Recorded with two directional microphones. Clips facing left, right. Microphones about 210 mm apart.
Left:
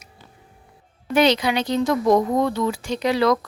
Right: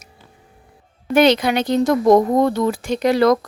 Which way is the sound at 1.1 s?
50° right (ahead or behind).